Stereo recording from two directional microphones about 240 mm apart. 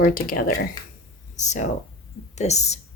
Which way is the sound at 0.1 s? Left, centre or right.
Left.